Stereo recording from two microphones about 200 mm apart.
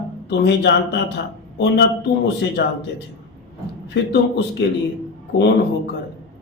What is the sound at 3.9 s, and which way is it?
Speech, 55° left (ahead or behind).